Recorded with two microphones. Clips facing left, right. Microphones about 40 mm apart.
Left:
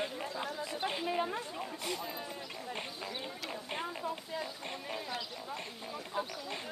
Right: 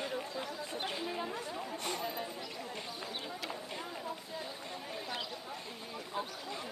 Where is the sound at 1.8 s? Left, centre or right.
Right.